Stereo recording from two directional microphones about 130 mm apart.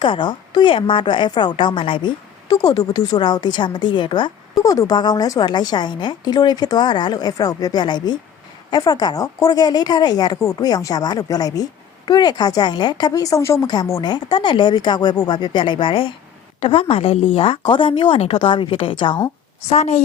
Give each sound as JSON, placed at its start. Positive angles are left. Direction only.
{"t": 0.0, "sound": "a woman's voice", "side_deg": 40}
{"t": 19.6, "sound": "a woman's voice", "side_deg": 60}